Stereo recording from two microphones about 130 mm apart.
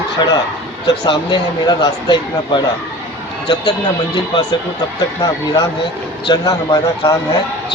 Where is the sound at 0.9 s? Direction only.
35° left (ahead or behind).